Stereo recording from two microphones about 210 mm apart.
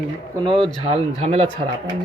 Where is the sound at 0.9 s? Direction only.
30° right (ahead or behind).